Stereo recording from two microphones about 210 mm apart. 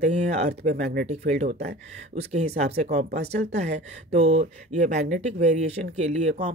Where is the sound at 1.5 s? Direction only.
50° right (ahead or behind).